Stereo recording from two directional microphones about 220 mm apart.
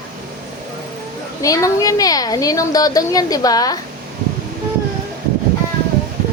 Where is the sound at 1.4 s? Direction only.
15° left (ahead or behind).